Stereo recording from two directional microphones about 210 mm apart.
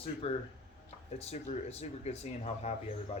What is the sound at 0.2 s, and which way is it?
Speech, 30° left (ahead or behind).